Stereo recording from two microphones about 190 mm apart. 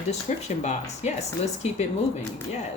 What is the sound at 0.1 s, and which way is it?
Speech, 35° left (ahead or behind).